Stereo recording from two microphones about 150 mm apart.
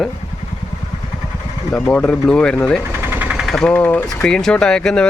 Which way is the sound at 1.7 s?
10° left (ahead or behind).